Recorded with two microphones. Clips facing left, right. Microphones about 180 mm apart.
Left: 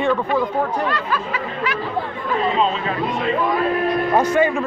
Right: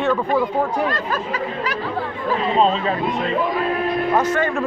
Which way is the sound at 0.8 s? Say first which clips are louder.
Even; 45° right (ahead or behind).